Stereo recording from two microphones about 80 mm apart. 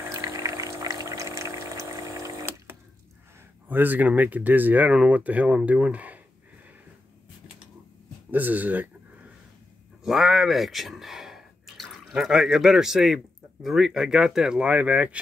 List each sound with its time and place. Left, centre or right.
0.1 s pour: right
3.6 s speech: right
8.3 s speech: right
10.0 s speech: centre